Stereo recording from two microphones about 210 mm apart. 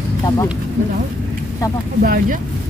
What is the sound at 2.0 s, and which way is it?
Speech, 40° right (ahead or behind).